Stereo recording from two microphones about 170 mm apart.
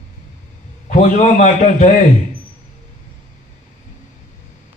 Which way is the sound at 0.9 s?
45° left (ahead or behind).